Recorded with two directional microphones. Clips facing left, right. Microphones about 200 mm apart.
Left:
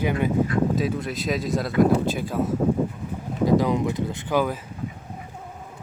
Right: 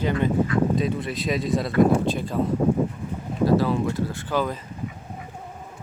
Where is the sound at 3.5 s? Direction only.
15° left (ahead or behind).